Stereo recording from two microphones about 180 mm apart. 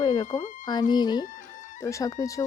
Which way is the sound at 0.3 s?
25° left (ahead or behind).